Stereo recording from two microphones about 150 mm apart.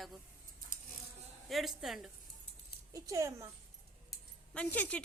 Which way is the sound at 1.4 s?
Centre (ahead or behind).